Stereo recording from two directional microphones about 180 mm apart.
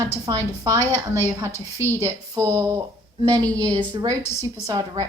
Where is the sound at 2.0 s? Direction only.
20° right (ahead or behind).